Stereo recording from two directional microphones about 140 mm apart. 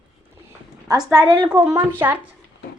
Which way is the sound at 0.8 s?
25° right (ahead or behind).